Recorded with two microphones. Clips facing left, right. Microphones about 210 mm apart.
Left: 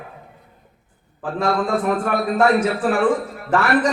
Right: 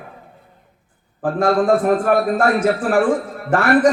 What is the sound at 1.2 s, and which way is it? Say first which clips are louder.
A man's voice: right 4 dB; 50° right (ahead or behind).